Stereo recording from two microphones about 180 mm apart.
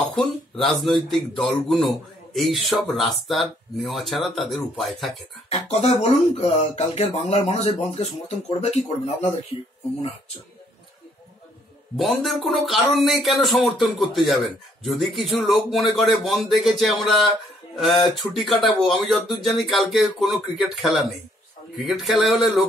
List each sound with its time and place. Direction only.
0.1 s speech: centre (ahead or behind)
5.5 s speech: 35° left (ahead or behind)
12.0 s speech: centre (ahead or behind)